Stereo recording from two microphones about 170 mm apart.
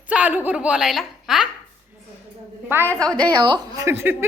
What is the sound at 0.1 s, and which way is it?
A woman's voice, 10° right (ahead or behind).